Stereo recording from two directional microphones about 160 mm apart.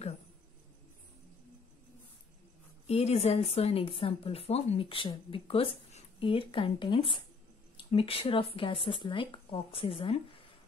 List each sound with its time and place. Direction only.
2.9 s speech: 40° left (ahead or behind)